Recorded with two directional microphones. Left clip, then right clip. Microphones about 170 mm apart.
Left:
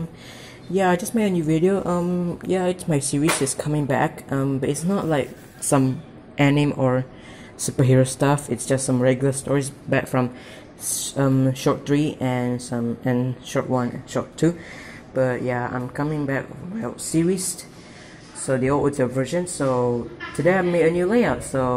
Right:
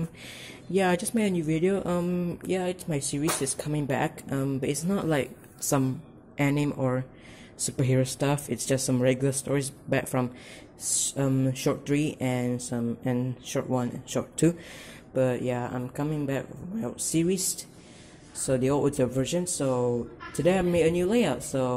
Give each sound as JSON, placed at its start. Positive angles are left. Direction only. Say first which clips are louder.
{"t": 0.7, "sound": "speech", "louder": "left 5 dB", "side_deg": -15}
{"t": 2.4, "sound": "a woman's voice", "louder": "left 8 dB", "side_deg": -5}
{"t": 15.1, "sound": "speech", "louder": "left 4 dB", "side_deg": -35}
{"t": 15.4, "sound": "speech", "louder": "left 6 dB", "side_deg": -25}
{"t": 18.4, "sound": "speech", "louder": "left 4 dB", "side_deg": -30}
{"t": 19.7, "sound": "speech", "louder": "left 5 dB", "side_deg": -10}
{"t": 20.4, "sound": "speech", "louder": "left 5 dB", "side_deg": -30}